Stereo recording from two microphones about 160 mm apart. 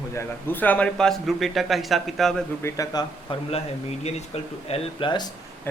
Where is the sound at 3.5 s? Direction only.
40° left (ahead or behind).